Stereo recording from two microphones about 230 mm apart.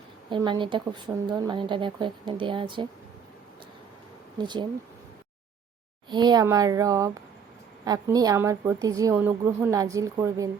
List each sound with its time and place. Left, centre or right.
0.3 s speech: centre
4.4 s speech: centre
6.1 s a woman's voice: centre